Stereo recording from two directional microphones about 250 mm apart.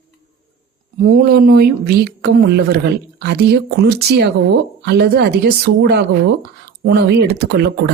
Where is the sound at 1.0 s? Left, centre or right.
Right.